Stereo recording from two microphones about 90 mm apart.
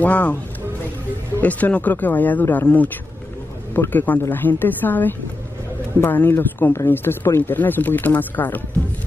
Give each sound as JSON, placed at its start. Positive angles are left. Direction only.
{"t": 0.0, "sound": "speech", "side_deg": 20}
{"t": 1.4, "sound": "speech", "side_deg": 15}